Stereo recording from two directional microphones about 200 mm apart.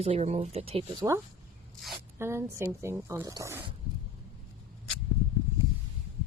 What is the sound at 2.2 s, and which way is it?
Speech, 15° right (ahead or behind).